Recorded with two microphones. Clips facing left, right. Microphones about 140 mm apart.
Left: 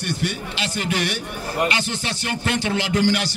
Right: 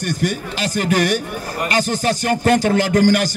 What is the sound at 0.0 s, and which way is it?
A man's voice, 45° right (ahead or behind).